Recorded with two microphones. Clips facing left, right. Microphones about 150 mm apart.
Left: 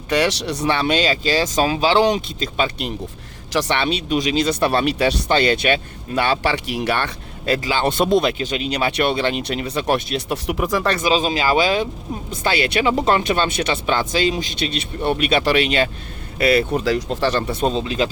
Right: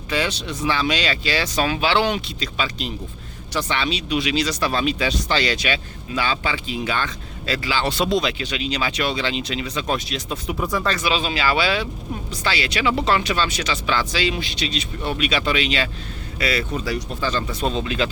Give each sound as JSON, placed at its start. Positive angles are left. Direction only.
{"t": 0.1, "sound": "speech", "side_deg": 80}
{"t": 0.7, "sound": "speech", "side_deg": 55}
{"t": 3.5, "sound": "speech", "side_deg": 90}
{"t": 3.8, "sound": "speech", "side_deg": 45}
{"t": 10.9, "sound": "speech", "side_deg": 40}
{"t": 16.8, "sound": "speech", "side_deg": 90}
{"t": 17.6, "sound": "speech", "side_deg": 35}